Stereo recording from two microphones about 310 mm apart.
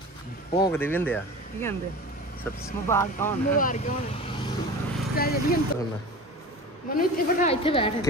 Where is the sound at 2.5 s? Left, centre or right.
Centre.